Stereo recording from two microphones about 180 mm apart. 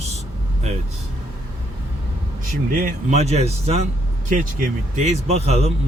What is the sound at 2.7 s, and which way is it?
Speech, 50° right (ahead or behind).